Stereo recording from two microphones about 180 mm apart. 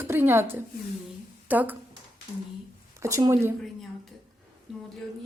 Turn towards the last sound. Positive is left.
turn(degrees=-15)  # may be behind; listen again after turning